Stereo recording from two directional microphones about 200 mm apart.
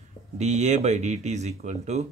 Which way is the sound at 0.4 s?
35° right (ahead or behind).